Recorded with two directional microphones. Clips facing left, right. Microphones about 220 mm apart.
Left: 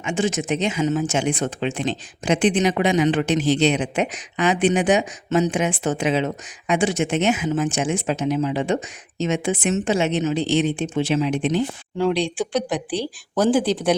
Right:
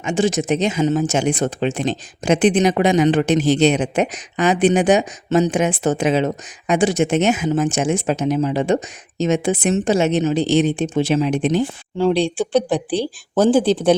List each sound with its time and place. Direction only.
0.0 s speech: 35° right (ahead or behind)
11.9 s speech: 30° right (ahead or behind)